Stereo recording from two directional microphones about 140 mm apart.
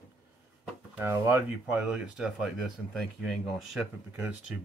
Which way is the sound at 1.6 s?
5° right (ahead or behind).